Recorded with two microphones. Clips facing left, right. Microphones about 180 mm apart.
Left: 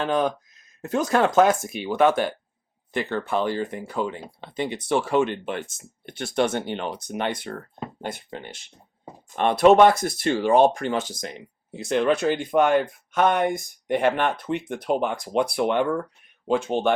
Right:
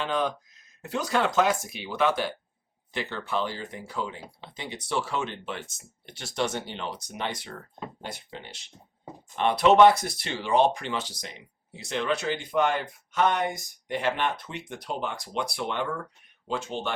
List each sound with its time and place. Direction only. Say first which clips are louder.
0.0 s speech: left 5 dB; 45° left (ahead or behind)